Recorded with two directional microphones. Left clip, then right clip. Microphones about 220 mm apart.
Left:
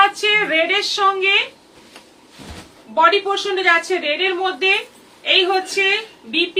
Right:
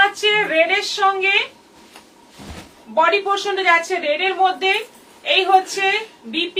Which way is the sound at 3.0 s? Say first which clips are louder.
Left 1 dB; 15° left (ahead or behind).